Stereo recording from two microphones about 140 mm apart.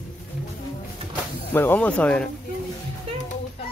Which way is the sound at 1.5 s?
15° left (ahead or behind).